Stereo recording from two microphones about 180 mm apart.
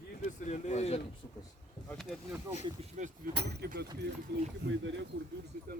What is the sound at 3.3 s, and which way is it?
Speech, 65° right (ahead or behind).